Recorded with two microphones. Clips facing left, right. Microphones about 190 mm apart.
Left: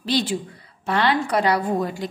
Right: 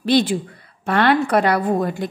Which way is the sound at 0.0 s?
55° right (ahead or behind).